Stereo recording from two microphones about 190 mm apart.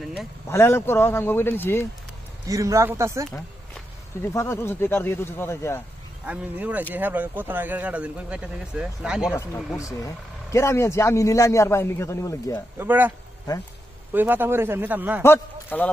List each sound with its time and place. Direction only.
0.5 s speech: 15° left (ahead or behind)
2.4 s speech: 15° right (ahead or behind)
4.2 s speech: 15° left (ahead or behind)
6.2 s speech: 5° right (ahead or behind)
9.8 s speech: 15° left (ahead or behind)
12.7 s speech: 10° right (ahead or behind)
14.1 s speech: 10° right (ahead or behind)
15.2 s speech: 10° left (ahead or behind)